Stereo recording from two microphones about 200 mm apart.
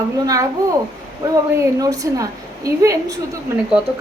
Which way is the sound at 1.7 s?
15° right (ahead or behind).